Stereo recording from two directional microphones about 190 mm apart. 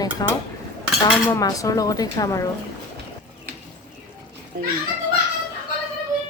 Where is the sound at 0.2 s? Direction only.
20° left (ahead or behind).